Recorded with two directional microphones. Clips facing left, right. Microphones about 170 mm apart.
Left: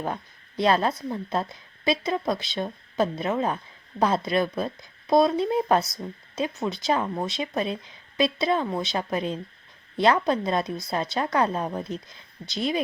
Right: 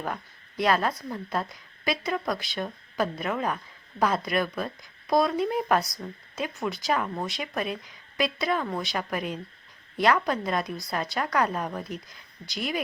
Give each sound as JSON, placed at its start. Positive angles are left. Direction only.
{"t": 0.0, "sound": "a woman's voice", "side_deg": 25}